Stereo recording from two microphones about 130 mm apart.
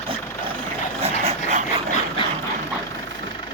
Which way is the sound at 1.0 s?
50° right (ahead or behind).